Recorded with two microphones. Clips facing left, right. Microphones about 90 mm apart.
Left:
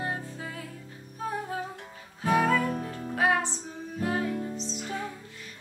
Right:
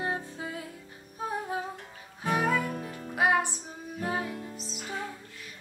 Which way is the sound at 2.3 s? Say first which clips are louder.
Left 3 dB; 10° right (ahead or behind).